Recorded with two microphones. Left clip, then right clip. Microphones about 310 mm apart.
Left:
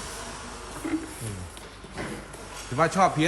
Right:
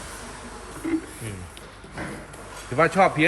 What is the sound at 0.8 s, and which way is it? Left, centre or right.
Music, left.